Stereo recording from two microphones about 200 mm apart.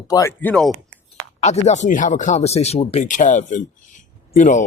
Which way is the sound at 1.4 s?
35° left (ahead or behind).